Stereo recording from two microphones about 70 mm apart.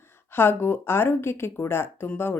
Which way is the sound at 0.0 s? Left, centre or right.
Left.